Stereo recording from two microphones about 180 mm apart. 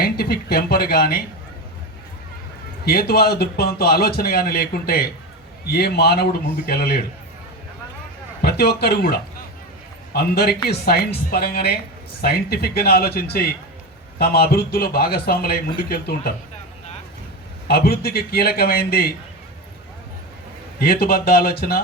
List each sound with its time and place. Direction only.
0.0 s a man's voice: 60° left (ahead or behind)
2.8 s a man's voice: 60° left (ahead or behind)
8.4 s a man's voice: 65° left (ahead or behind)
17.7 s a man's voice: 60° left (ahead or behind)
20.7 s a man's voice: 55° left (ahead or behind)